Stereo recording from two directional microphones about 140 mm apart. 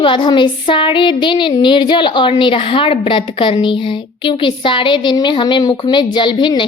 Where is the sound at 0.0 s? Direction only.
35° left (ahead or behind).